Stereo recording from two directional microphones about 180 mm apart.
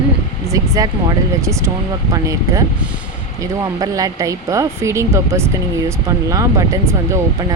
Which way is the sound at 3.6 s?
20° right (ahead or behind).